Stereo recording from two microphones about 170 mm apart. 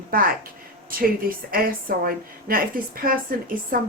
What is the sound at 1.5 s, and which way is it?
Speech, 60° right (ahead or behind).